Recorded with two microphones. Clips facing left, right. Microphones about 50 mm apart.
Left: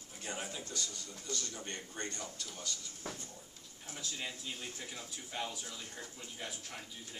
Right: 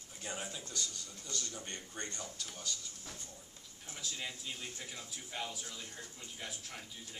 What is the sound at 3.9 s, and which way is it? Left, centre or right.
Speech, centre.